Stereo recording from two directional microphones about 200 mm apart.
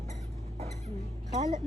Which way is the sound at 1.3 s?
30° right (ahead or behind).